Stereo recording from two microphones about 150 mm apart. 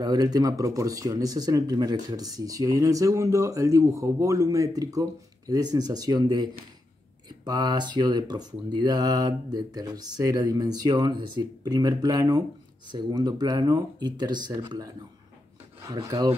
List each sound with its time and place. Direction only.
0.0 s speech: 25° right (ahead or behind)
15.9 s speech: 25° right (ahead or behind)